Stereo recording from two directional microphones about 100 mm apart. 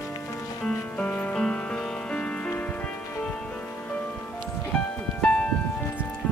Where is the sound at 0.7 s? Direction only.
10° left (ahead or behind).